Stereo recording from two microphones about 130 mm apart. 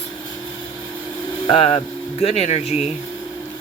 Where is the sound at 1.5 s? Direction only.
50° left (ahead or behind).